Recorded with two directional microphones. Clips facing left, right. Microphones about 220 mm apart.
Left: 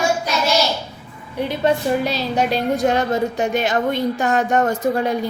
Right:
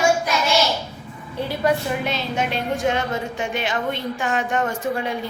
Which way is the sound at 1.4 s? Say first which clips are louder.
Left 3 dB; 20° left (ahead or behind).